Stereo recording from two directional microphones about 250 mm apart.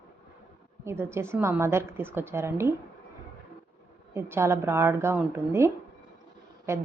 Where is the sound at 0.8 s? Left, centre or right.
Centre.